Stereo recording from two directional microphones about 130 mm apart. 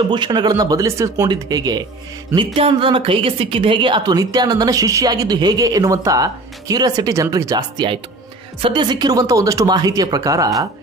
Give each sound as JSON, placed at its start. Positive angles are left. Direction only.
{"t": 0.1, "sound": "speech", "side_deg": -35}
{"t": 2.3, "sound": "a woman's voice", "side_deg": -45}